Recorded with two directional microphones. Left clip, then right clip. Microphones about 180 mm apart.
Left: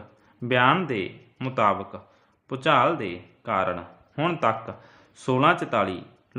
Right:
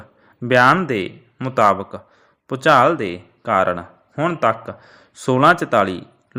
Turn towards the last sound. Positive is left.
turn(degrees=-35)  # may be behind; listen again after turning